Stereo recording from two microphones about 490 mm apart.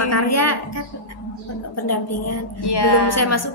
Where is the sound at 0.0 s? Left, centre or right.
Left.